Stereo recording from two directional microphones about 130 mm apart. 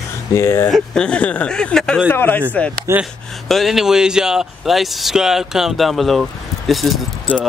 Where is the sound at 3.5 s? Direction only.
Centre (ahead or behind).